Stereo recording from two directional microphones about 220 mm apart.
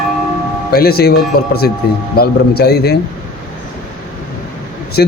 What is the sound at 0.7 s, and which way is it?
A man's voice, 45° left (ahead or behind).